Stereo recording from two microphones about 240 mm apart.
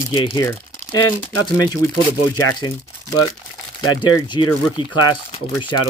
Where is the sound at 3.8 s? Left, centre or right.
Centre.